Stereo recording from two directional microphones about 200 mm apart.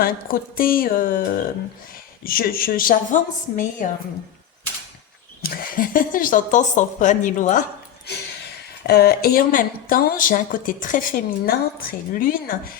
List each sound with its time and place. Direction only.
0.0 s a woman's voice: 45° left (ahead or behind)
5.4 s speech: 45° left (ahead or behind)
8.9 s a woman's voice: 50° left (ahead or behind)